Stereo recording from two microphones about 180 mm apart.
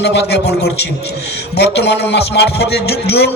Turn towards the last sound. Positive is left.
turn(degrees=65)  # may be behind; listen again after turning